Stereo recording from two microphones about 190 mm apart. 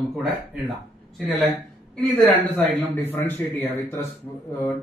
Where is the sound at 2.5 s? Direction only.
10° left (ahead or behind).